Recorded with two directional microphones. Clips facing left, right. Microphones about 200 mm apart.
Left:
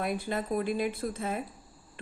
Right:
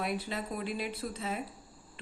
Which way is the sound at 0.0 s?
50° left (ahead or behind).